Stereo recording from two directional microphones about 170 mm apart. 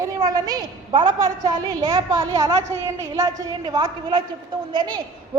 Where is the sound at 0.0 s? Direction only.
20° right (ahead or behind).